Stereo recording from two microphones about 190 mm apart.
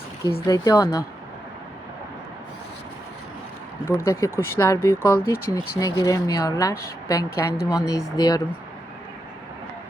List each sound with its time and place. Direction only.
0.4 s speech: 20° left (ahead or behind)
3.8 s speech: 15° left (ahead or behind)